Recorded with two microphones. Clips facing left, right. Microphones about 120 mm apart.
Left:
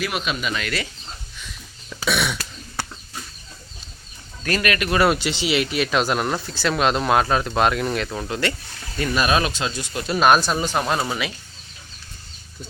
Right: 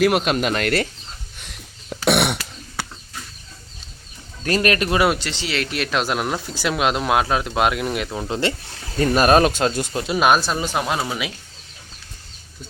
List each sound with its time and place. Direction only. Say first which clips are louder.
0.0 s speech: right 8 dB; 65° right (ahead or behind)
1.4 s throat clearing: left 1 dB; 65° right (ahead or behind)
4.4 s speech: right 3 dB; 35° right (ahead or behind)
5.0 s speech: left 1 dB; 5° left (ahead or behind); by 8.3 s 10° right (ahead or behind)
8.3 s speech: right 3 dB; 25° right (ahead or behind)
9.0 s speech: right 6 dB; 45° right (ahead or behind)
10.1 s speech: left 1 dB; 5° right (ahead or behind)